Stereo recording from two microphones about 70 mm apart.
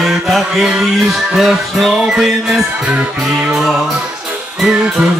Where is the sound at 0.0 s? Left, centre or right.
Centre.